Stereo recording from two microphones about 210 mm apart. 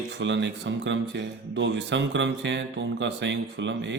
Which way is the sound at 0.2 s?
60° right (ahead or behind).